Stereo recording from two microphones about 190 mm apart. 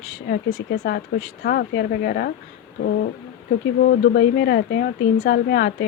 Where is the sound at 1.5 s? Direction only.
55° left (ahead or behind).